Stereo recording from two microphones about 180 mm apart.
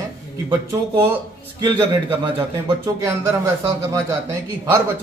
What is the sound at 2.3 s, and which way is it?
Speech, 30° right (ahead or behind).